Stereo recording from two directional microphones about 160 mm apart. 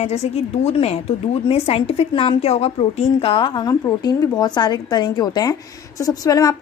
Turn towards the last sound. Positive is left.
turn(degrees=20)  # may be behind; listen again after turning